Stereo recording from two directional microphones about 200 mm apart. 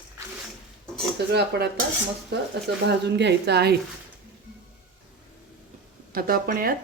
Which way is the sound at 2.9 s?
60° right (ahead or behind).